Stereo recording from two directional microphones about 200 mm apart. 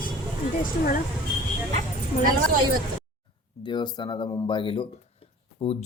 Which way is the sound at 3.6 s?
20° left (ahead or behind).